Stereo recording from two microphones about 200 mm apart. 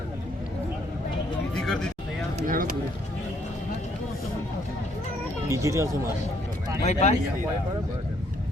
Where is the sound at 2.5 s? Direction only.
45° right (ahead or behind).